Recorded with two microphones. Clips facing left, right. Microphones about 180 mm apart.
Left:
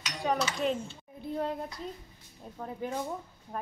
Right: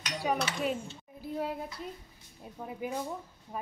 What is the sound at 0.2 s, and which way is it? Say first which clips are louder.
A child's voice: left 2 dB; 5° right (ahead or behind).